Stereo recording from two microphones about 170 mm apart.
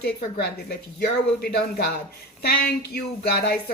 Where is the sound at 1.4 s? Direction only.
70° left (ahead or behind).